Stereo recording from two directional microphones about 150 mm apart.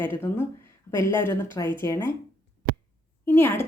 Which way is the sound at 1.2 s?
15° left (ahead or behind).